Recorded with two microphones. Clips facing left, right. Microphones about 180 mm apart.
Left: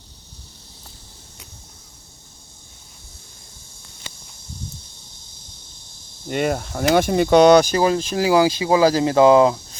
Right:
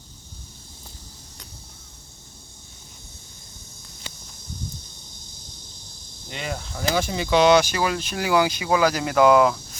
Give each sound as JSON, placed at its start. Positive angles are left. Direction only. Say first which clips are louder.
{"t": 6.2, "sound": "speech", "louder": "left 10 dB", "side_deg": 50}